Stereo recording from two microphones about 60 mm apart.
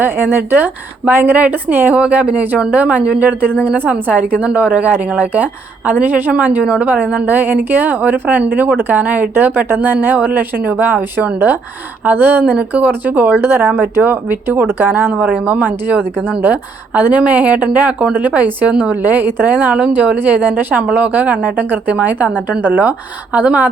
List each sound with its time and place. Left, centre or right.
0.0 s a woman's voice: right
15.4 s a woman's voice: right